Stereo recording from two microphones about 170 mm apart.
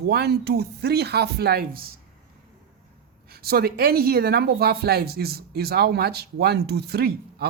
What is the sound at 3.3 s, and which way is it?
A woman's voice, 65° right (ahead or behind).